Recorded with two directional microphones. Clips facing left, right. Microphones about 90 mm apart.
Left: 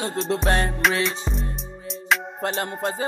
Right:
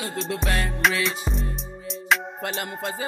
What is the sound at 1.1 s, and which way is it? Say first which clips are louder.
Music: even; centre (ahead or behind).